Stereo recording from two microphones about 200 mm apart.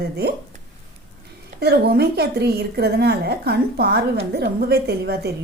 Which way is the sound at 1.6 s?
50° right (ahead or behind).